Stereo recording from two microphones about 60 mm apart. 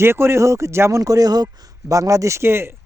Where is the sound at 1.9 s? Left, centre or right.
Right.